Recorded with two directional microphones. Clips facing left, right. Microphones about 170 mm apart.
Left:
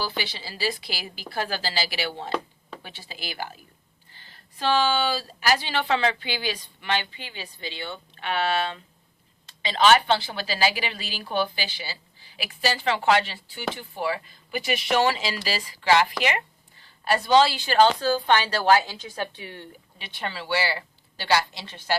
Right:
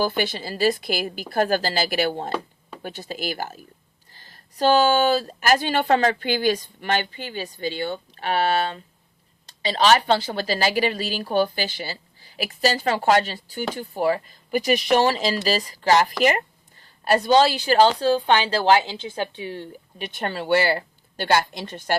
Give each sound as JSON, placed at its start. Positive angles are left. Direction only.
{"t": 0.2, "sound": "a woman's voice", "side_deg": -50}
{"t": 20.0, "sound": "speech", "side_deg": -45}